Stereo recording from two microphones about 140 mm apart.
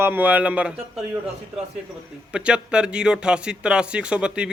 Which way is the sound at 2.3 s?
5° right (ahead or behind).